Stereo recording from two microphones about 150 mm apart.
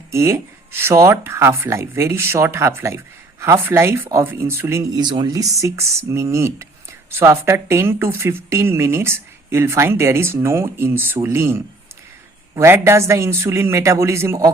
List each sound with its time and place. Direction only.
0.1 s speech: 20° right (ahead or behind)